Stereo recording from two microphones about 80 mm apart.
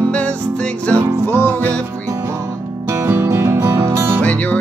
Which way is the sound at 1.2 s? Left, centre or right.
Left.